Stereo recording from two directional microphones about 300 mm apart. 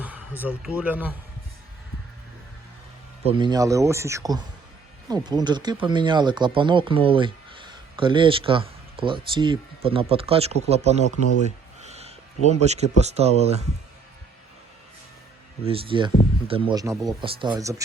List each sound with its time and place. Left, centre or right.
0.0 s speech: centre
3.2 s speech: centre
15.6 s speech: centre